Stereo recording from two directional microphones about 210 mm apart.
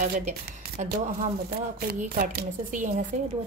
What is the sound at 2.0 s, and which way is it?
A woman's voice, 40° right (ahead or behind).